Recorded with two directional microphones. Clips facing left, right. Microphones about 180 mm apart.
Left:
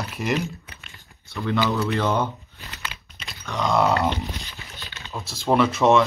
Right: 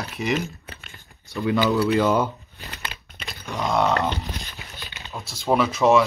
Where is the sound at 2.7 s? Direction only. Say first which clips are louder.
Even; 55° right (ahead or behind).